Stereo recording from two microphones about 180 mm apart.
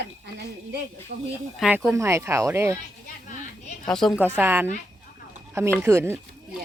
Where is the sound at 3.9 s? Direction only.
Centre (ahead or behind).